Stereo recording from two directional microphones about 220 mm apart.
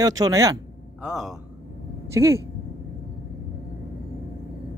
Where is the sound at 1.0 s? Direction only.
Centre (ahead or behind).